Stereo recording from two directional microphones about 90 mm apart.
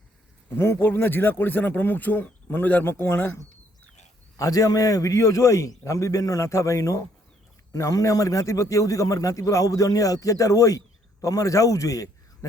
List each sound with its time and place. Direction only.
0.5 s speech: 25° left (ahead or behind)
4.4 s a man's voice: 40° left (ahead or behind)